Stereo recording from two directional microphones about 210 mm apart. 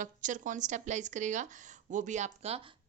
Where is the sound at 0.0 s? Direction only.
35° right (ahead or behind).